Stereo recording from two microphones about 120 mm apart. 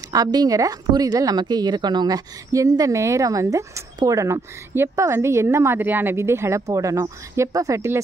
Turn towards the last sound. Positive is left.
turn(degrees=-25)  # may be behind; listen again after turning